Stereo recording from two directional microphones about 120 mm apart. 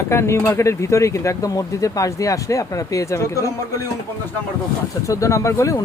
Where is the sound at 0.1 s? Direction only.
20° left (ahead or behind).